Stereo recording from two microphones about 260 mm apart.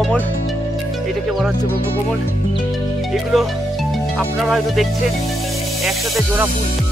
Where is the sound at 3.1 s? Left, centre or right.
Centre.